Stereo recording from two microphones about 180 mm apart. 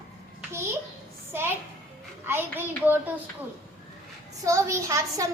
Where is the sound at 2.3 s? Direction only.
10° right (ahead or behind).